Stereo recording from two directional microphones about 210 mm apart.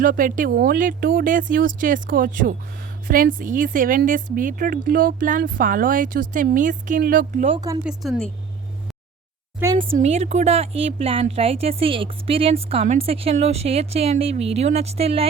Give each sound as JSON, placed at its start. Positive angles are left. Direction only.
{"t": 0.0, "sound": "speech", "side_deg": -40}
{"t": 7.4, "sound": "a woman's voice", "side_deg": -25}
{"t": 7.9, "sound": "speech", "side_deg": 0}
{"t": 9.6, "sound": "speech", "side_deg": -15}
{"t": 9.9, "sound": "a woman's voice", "side_deg": -30}